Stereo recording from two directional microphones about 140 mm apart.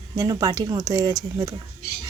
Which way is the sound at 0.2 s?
25° right (ahead or behind).